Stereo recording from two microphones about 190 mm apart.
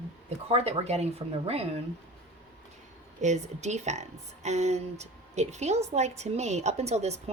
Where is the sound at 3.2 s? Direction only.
35° right (ahead or behind).